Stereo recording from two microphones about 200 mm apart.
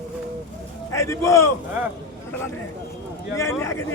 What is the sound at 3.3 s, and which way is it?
Speech, 15° left (ahead or behind).